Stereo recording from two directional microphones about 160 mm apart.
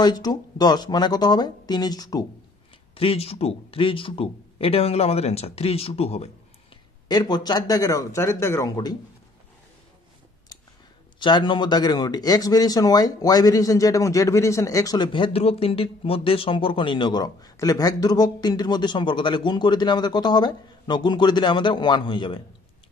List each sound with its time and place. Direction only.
0.0 s speech: 25° left (ahead or behind)
2.9 s speech: 35° left (ahead or behind)
7.1 s speech: 25° left (ahead or behind)
11.1 s speech: 30° left (ahead or behind)